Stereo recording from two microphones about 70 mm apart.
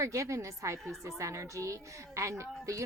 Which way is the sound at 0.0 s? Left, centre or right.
Right.